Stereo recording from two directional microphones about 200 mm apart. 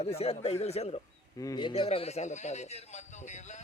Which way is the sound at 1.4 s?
20° left (ahead or behind).